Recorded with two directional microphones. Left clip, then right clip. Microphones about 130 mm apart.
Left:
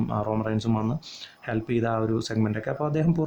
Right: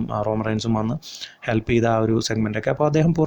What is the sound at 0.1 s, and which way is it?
Speech, 25° right (ahead or behind).